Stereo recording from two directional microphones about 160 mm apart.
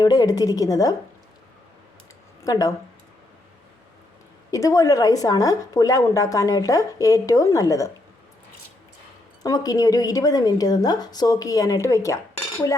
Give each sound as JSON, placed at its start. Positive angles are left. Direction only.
{"t": 0.0, "sound": "a woman's voice", "side_deg": 25}
{"t": 2.4, "sound": "speech", "side_deg": 20}
{"t": 4.5, "sound": "a woman's voice", "side_deg": 20}
{"t": 9.4, "sound": "a woman's voice", "side_deg": 25}